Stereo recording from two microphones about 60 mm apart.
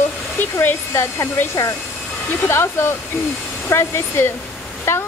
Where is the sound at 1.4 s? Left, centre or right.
Left.